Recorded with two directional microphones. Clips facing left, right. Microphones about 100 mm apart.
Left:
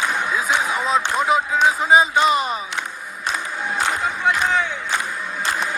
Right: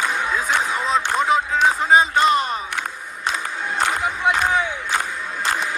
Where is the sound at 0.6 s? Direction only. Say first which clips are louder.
Left 1 dB; 5° left (ahead or behind).